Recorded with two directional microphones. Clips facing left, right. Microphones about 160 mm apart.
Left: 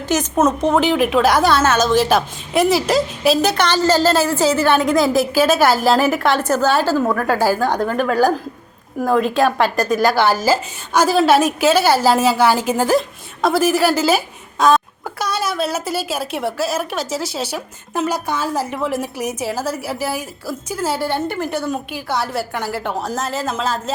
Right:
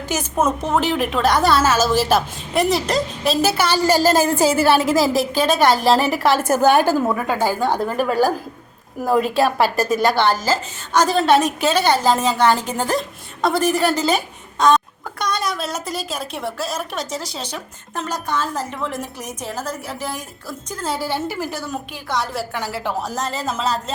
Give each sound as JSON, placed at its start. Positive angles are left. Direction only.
{"t": 0.1, "sound": "a woman's voice", "side_deg": -10}
{"t": 7.3, "sound": "a woman's voice", "side_deg": 5}